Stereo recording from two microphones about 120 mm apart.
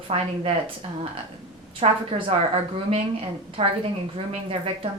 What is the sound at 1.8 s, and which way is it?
Speech, 60° right (ahead or behind).